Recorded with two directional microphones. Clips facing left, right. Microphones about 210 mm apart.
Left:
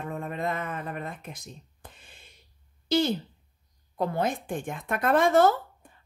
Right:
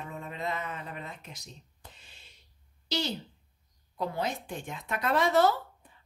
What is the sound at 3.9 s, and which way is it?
Speech, 50° left (ahead or behind).